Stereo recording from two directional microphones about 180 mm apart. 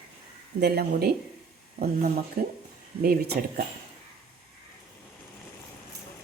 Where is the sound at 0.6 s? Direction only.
60° right (ahead or behind).